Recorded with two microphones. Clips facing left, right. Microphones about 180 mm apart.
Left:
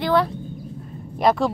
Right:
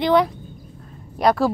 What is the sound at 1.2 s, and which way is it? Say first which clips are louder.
Speech: right 1 dB; centre (ahead or behind).